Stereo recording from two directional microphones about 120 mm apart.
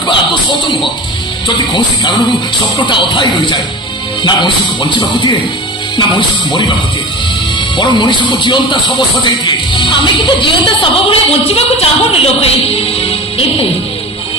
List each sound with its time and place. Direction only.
0.0 s a sound: 40° left (ahead or behind)
1.7 s speech: 40° left (ahead or behind)
7.7 s a woman's voice: 40° left (ahead or behind)